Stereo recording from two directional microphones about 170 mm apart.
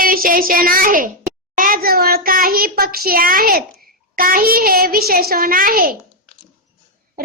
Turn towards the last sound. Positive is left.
turn(degrees=-60)  # may be behind; listen again after turning